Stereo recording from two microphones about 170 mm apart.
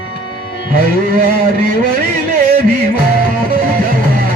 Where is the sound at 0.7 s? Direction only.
60° right (ahead or behind).